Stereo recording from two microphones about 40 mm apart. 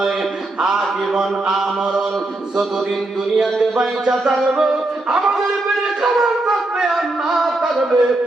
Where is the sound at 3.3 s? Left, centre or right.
Centre.